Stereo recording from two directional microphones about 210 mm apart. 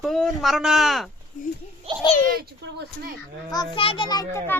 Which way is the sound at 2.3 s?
50° right (ahead or behind).